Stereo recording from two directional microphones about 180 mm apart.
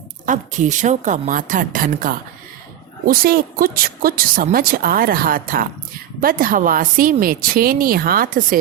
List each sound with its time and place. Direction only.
0.3 s speech: 45° right (ahead or behind)